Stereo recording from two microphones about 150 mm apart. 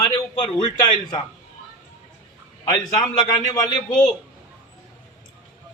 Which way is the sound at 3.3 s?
25° left (ahead or behind).